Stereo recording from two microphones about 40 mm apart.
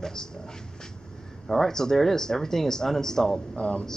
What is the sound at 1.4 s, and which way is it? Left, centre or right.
Speech, centre.